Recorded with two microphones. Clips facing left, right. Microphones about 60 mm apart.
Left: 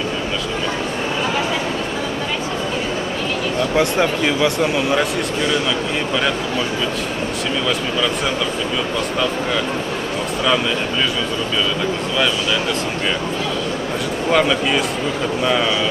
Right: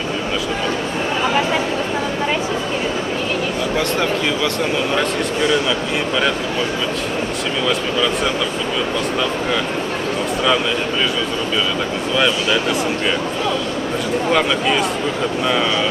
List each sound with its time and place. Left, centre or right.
3.7 s speech: centre
14.3 s speech: centre